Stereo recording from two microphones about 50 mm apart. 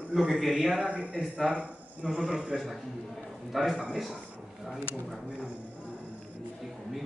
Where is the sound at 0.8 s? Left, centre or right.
Right.